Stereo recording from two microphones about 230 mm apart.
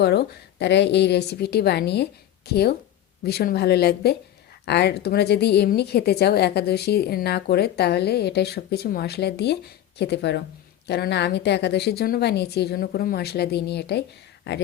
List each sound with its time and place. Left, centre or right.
0.0 s speech: left